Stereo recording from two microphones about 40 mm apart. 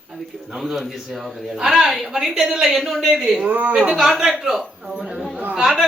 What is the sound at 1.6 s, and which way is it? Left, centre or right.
A woman's voice, centre.